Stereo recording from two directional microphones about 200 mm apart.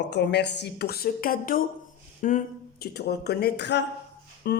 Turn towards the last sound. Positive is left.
turn(degrees=50)  # may be behind; listen again after turning